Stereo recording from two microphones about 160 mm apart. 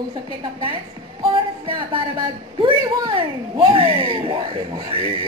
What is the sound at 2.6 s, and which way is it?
A woman's voice, 30° right (ahead or behind).